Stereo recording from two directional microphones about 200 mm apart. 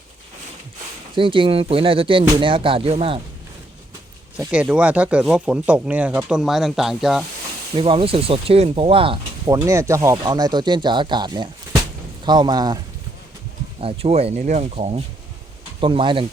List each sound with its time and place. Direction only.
1.1 s speech: 25° right (ahead or behind)
4.4 s speech: 5° right (ahead or behind)
7.8 s speech: 25° right (ahead or behind)
9.5 s speech: 15° right (ahead or behind)
13.8 s speech: 30° right (ahead or behind)